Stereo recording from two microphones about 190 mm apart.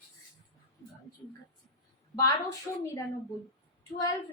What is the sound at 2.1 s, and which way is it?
A woman's voice, 20° left (ahead or behind).